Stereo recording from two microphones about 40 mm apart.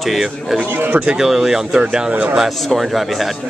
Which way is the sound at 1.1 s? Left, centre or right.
Centre.